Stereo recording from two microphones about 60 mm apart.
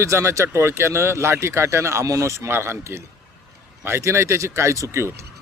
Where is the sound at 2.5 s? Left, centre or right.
Right.